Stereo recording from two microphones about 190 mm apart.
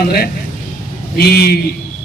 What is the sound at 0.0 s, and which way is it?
A man's voice, 55° left (ahead or behind).